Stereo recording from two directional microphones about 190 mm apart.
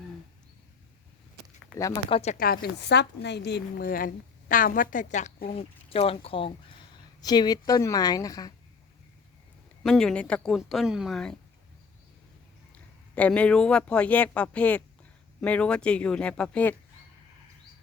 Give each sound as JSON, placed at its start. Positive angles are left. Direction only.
{"t": 2.0, "sound": "speech", "side_deg": 35}
{"t": 2.4, "sound": "a woman's voice", "side_deg": 50}
{"t": 9.8, "sound": "speech", "side_deg": 5}
{"t": 12.7, "sound": "a man's voice", "side_deg": 5}